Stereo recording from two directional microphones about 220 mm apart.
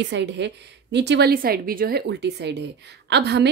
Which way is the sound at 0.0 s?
50° right (ahead or behind).